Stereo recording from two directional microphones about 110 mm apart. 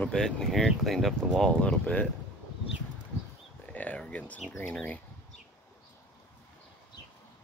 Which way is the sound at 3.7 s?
10° left (ahead or behind).